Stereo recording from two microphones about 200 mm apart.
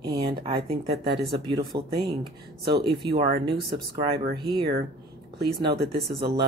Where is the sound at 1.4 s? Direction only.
20° right (ahead or behind).